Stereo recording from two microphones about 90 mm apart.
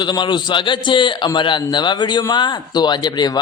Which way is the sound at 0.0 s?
55° left (ahead or behind).